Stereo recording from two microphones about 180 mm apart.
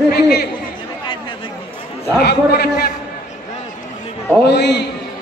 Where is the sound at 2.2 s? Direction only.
60° left (ahead or behind).